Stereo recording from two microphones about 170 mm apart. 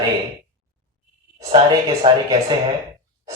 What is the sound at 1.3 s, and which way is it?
Speech, 25° right (ahead or behind).